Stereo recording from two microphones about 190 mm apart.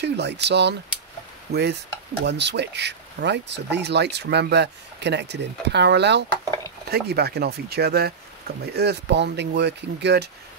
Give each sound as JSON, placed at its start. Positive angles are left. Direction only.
{"t": 0.0, "sound": "speech", "side_deg": -65}